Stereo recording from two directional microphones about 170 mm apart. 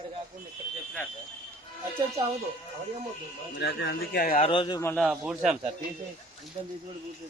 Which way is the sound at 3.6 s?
80° left.